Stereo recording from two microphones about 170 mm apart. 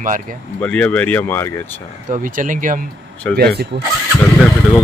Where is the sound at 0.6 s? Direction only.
5° left (ahead or behind).